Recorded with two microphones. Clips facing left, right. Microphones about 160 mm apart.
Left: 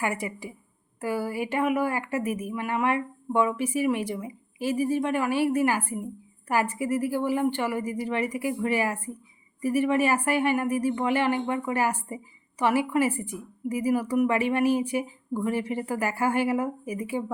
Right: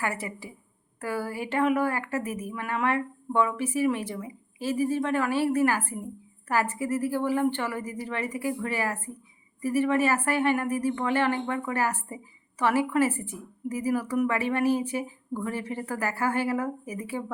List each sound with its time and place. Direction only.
0.0 s speech: 15° left (ahead or behind)